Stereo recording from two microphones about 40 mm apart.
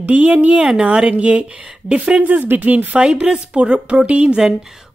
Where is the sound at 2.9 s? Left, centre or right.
Right.